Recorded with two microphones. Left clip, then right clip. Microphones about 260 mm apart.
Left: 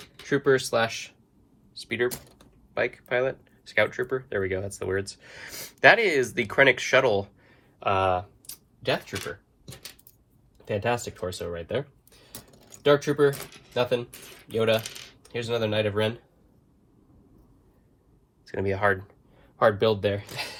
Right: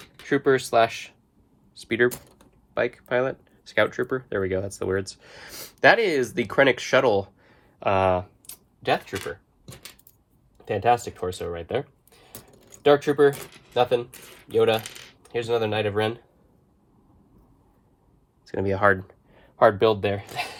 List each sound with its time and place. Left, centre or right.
0.3 s speech: right
2.7 s speech: centre; by 9.1 s right
10.7 s speech: right
12.5 s a sound: centre
12.8 s speech: right
14.5 s speech: right
18.4 s speech: centre
19.5 s speech: right